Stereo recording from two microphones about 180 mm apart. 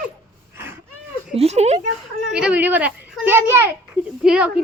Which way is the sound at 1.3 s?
35° right (ahead or behind).